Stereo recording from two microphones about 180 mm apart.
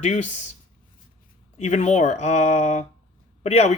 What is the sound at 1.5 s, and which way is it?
Speech, 40° left (ahead or behind).